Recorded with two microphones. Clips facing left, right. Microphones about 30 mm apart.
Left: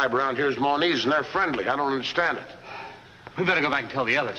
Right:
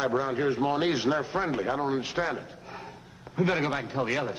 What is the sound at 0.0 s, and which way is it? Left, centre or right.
A man's voice, left.